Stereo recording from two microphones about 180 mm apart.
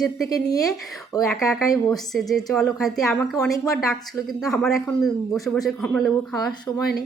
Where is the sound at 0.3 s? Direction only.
20° left (ahead or behind).